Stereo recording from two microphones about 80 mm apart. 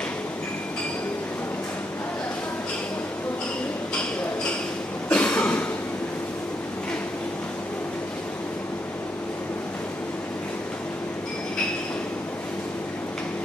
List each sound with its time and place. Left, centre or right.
5.1 s cough: centre